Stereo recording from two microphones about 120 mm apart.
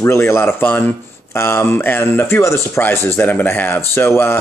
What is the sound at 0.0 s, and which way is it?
Speech, 20° left (ahead or behind).